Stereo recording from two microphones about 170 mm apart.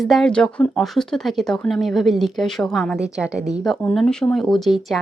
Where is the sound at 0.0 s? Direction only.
Centre (ahead or behind).